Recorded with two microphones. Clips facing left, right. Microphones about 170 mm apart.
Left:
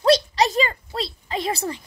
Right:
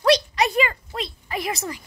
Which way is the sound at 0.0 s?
30° left (ahead or behind).